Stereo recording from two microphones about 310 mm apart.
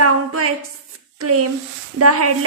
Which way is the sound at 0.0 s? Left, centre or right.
Right.